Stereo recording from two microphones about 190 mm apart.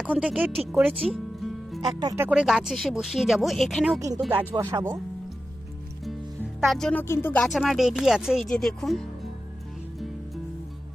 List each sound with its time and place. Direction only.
0.0 s speech: 5° right (ahead or behind)
1.0 s music: centre (ahead or behind)
1.8 s speech: 20° right (ahead or behind); by 4.0 s centre (ahead or behind)
4.3 s speech: 15° right (ahead or behind)
6.7 s speech: 5° left (ahead or behind)